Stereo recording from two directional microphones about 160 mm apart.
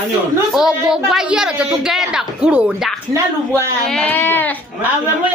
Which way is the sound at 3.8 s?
5° left (ahead or behind).